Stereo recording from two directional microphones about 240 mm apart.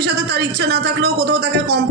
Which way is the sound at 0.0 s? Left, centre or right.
Right.